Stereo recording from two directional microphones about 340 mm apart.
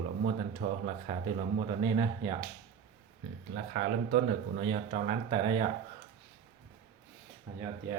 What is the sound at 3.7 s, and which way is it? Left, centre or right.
Speech, right.